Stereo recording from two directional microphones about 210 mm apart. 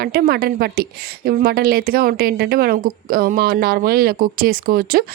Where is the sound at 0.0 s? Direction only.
45° right (ahead or behind).